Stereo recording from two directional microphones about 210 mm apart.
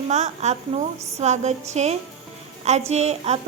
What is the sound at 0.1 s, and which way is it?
Speech, 35° right (ahead or behind).